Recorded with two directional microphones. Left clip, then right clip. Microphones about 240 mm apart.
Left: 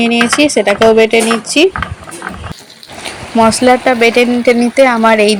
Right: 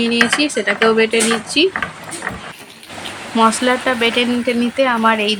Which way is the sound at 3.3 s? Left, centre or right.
Centre.